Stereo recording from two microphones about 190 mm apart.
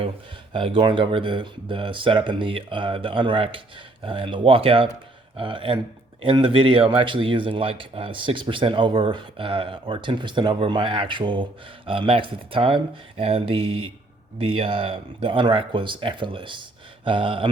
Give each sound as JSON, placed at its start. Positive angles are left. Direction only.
{"t": 0.5, "sound": "speech", "side_deg": -25}